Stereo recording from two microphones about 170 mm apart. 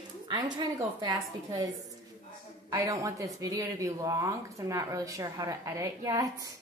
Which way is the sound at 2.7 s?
20° right (ahead or behind).